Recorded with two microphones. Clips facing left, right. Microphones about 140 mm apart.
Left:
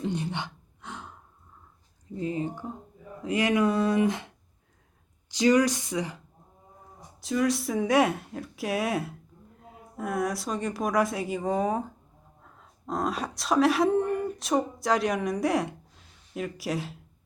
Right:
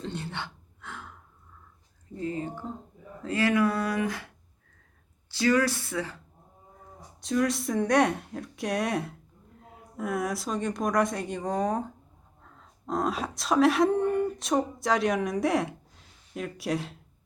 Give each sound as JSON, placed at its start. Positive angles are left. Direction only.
{"t": 0.0, "sound": "gasp", "side_deg": 15}
{"t": 2.1, "sound": "speech", "side_deg": 20}
{"t": 5.3, "sound": "speech", "side_deg": 15}
{"t": 7.2, "sound": "speech", "side_deg": 0}